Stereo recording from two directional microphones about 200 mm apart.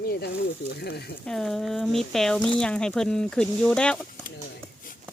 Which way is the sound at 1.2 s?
Centre (ahead or behind).